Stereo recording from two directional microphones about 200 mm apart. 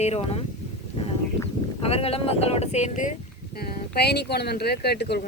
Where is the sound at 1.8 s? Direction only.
30° left (ahead or behind).